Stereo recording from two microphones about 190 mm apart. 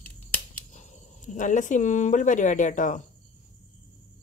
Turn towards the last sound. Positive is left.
turn(degrees=40)  # may be behind; listen again after turning